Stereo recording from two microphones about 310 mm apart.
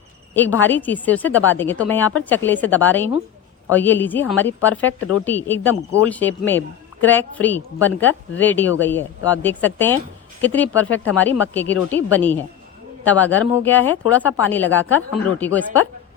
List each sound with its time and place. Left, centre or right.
0.6 s a woman's voice: centre
4.9 s speech: left
5.2 s a woman's voice: centre